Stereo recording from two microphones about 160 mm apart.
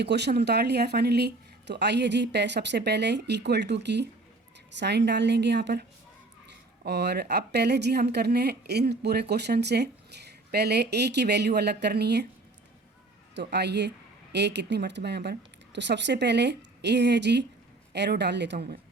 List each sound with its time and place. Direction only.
0.0 s speech: 90° right
13.3 s speech: 90° right